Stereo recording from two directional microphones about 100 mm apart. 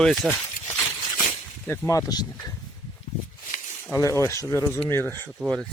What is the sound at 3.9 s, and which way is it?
Speech, 30° left (ahead or behind).